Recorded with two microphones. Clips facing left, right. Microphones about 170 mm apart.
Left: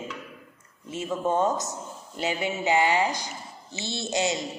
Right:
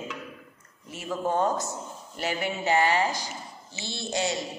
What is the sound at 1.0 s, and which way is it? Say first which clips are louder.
Music: left 1 dB; 5° left (ahead or behind).